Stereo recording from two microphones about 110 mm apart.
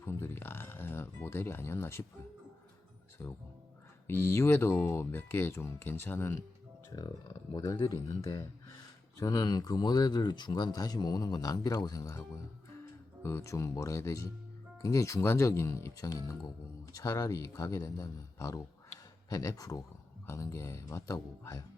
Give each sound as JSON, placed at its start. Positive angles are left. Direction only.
{"t": 0.0, "sound": "speech", "side_deg": 20}
{"t": 3.2, "sound": "speech", "side_deg": 20}
{"t": 6.9, "sound": "speech", "side_deg": 40}
{"t": 13.2, "sound": "speech", "side_deg": 25}